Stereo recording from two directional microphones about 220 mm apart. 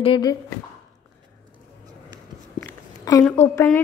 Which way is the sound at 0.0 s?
20° left (ahead or behind).